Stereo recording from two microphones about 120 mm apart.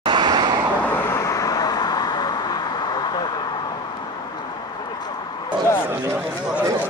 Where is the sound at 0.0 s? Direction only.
40° right (ahead or behind).